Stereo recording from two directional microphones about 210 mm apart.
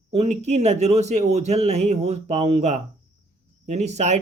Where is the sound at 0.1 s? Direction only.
35° right (ahead or behind).